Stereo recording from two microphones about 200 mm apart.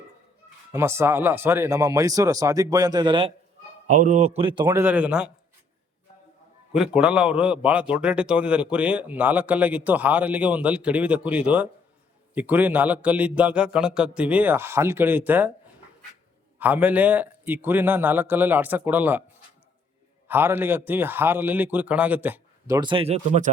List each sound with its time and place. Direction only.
0.7 s a man's voice: 10° right (ahead or behind)
3.9 s speech: 35° right (ahead or behind)
4.7 s a man's voice: 10° right (ahead or behind)
6.7 s a man's voice: 5° right (ahead or behind)
16.6 s a man's voice: 10° right (ahead or behind)
20.2 s a man's voice: 10° right (ahead or behind); by 23.5 s 35° right (ahead or behind)